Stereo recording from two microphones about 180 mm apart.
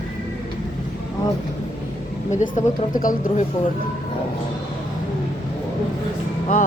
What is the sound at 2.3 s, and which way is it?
A woman's voice, 45° left (ahead or behind).